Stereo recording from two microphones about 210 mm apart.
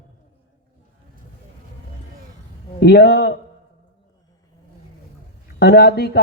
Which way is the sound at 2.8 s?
50° left (ahead or behind).